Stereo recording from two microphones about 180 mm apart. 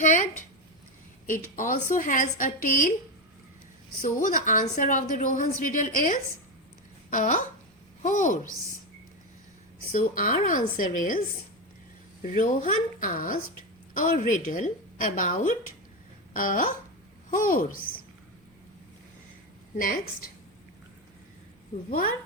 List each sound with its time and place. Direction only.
0.0 s a sound: 45° left (ahead or behind)
1.3 s a woman's voice: 45° left (ahead or behind)
4.0 s a woman's voice: 45° left (ahead or behind)
9.9 s a woman's voice: 50° left (ahead or behind)
12.2 s a woman's voice: 45° left (ahead or behind)
19.7 s a woman's voice: 50° left (ahead or behind)
21.8 s a woman's voice: 50° left (ahead or behind)